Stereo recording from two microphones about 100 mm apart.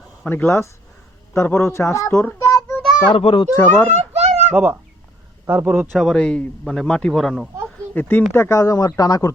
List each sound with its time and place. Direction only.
0.3 s speech: 25° left (ahead or behind)
2.5 s child singing: 25° left (ahead or behind)
3.1 s a child's voice: 70° left (ahead or behind)
3.5 s speech: 25° left (ahead or behind)
3.9 s a sound: 90° right
4.4 s a child's voice: 15° right (ahead or behind)
5.9 s a man's voice: centre (ahead or behind)
7.9 s speech: 20° left (ahead or behind); by 9.3 s 40° left (ahead or behind)